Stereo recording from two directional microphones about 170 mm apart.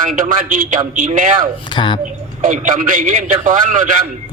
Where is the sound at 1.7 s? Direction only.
30° left (ahead or behind).